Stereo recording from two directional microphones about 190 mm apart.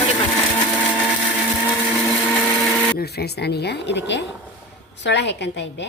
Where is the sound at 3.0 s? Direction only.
55° left (ahead or behind).